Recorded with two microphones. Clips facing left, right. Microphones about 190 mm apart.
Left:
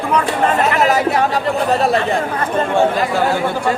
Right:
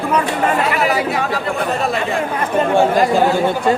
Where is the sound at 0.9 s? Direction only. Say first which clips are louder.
Left 3 dB; 45° left (ahead or behind).